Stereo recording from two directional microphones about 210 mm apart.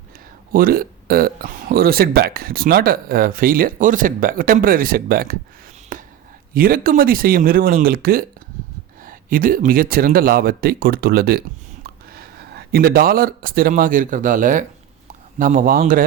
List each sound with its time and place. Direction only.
0.5 s speech: 45° right (ahead or behind)
5.9 s whispering: 40° right (ahead or behind)
6.5 s speech: 45° right (ahead or behind)